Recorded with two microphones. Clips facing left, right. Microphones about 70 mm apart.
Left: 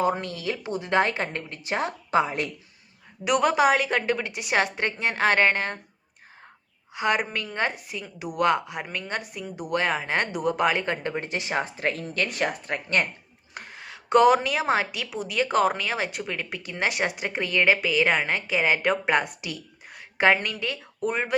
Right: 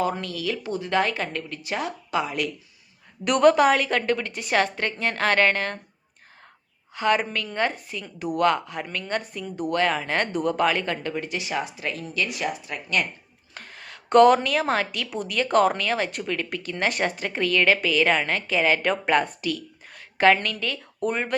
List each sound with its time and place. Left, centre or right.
0.0 s a woman's voice: left
3.2 s a woman's voice: centre
6.9 s a woman's voice: centre; by 13.1 s left
13.5 s a woman's voice: centre